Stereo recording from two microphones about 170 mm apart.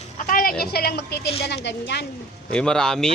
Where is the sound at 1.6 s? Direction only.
85° left.